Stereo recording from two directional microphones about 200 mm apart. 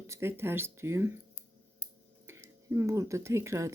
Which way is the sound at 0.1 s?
10° right (ahead or behind).